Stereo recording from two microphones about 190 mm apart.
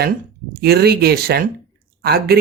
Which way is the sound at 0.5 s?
55° right (ahead or behind).